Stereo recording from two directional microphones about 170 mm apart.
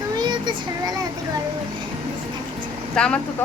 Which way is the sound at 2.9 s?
5° left (ahead or behind).